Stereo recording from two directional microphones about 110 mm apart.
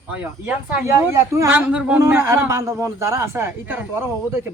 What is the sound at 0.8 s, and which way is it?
Speech, 25° right (ahead or behind).